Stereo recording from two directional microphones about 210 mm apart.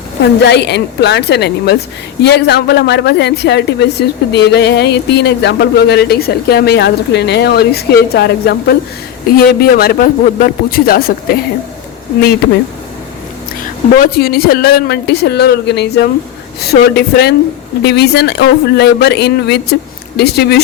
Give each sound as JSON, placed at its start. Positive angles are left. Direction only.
{"t": 0.2, "sound": "a woman's voice", "side_deg": 55}
{"t": 13.9, "sound": "a woman's voice", "side_deg": 45}